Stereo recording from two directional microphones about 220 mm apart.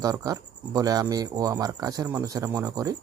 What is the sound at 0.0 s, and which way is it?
Speech, 15° right (ahead or behind).